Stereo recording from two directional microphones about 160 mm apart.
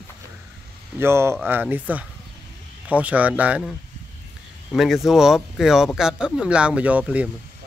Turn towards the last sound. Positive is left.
turn(degrees=-10)  # may be behind; listen again after turning